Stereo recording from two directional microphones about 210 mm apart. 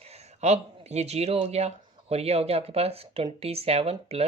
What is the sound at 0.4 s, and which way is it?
Speech, 30° right (ahead or behind).